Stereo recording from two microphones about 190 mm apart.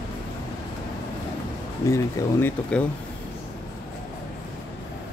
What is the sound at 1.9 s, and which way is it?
Speech, 15° left (ahead or behind).